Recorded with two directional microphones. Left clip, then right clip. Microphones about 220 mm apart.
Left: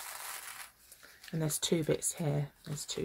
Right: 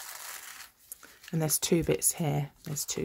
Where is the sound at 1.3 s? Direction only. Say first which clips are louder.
Right 4 dB; 35° right (ahead or behind).